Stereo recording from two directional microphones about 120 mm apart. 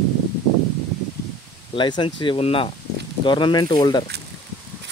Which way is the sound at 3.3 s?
40° left (ahead or behind).